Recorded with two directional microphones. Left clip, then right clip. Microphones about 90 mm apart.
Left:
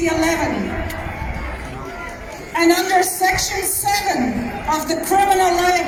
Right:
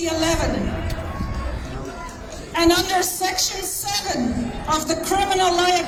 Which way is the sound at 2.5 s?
15° left (ahead or behind).